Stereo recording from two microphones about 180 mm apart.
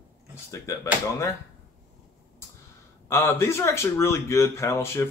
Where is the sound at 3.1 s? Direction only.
15° left (ahead or behind).